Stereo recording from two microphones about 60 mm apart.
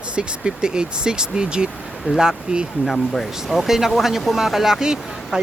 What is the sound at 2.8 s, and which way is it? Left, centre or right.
Speech, centre.